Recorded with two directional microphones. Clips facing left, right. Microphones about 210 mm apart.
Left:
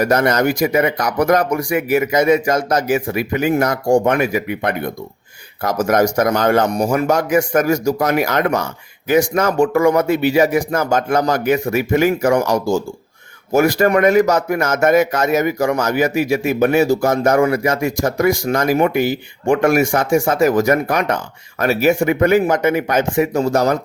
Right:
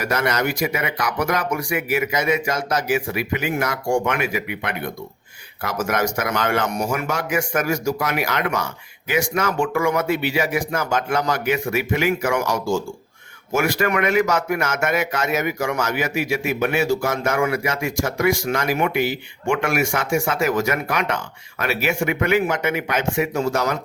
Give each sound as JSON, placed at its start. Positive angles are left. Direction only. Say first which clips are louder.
{"t": 0.0, "sound": "a man's voice", "louder": "left 7 dB", "side_deg": 40}